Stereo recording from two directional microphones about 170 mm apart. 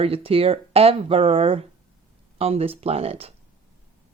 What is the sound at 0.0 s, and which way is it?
Speech, 35° right (ahead or behind).